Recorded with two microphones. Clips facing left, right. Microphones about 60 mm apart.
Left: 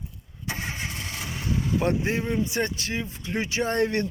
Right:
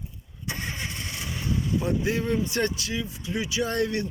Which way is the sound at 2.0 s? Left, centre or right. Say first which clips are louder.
Even; left.